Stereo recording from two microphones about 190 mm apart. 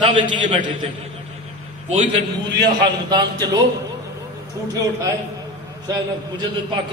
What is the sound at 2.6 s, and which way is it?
Speech, 25° right (ahead or behind).